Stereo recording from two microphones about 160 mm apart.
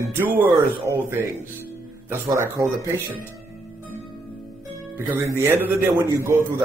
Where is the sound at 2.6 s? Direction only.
15° right (ahead or behind).